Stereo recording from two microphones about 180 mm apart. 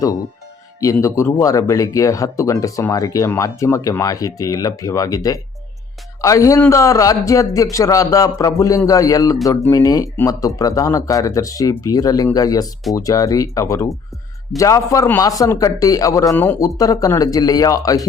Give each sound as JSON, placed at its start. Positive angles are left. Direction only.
{"t": 0.8, "sound": "speech", "side_deg": 15}